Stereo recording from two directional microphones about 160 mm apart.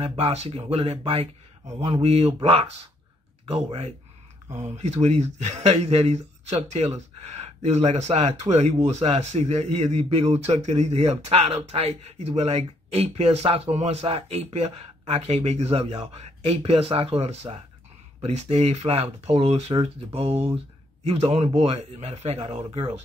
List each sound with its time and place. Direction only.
0.0 s a man's voice: 35° right (ahead or behind)